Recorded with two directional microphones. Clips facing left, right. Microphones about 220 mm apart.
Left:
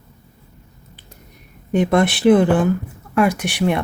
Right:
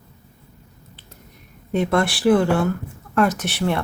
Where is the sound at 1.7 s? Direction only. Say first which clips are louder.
Left 4 dB; 15° left (ahead or behind).